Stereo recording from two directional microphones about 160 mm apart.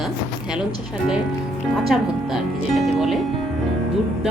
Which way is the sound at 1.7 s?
Centre (ahead or behind).